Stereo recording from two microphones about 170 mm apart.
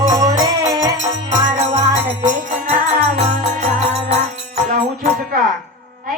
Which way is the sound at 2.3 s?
50° right (ahead or behind).